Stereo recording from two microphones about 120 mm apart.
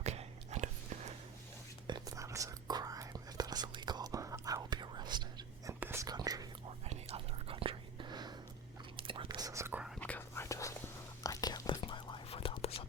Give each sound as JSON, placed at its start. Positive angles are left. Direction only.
{"t": 0.0, "sound": "a sound", "side_deg": -65}
{"t": 1.9, "sound": "whispering", "side_deg": -30}
{"t": 5.8, "sound": "whispering", "side_deg": -20}
{"t": 6.1, "sound": "whispering", "side_deg": -35}
{"t": 6.8, "sound": "whispering", "side_deg": -65}
{"t": 9.4, "sound": "whispering", "side_deg": -25}
{"t": 9.7, "sound": "whispering", "side_deg": -5}
{"t": 10.0, "sound": "whispering", "side_deg": 15}